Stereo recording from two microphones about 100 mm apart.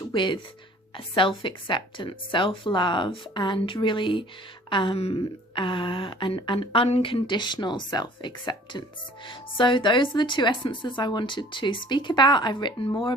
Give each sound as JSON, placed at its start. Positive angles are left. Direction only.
{"t": 0.1, "sound": "a woman's voice", "side_deg": 55}
{"t": 5.5, "sound": "a woman's voice", "side_deg": 55}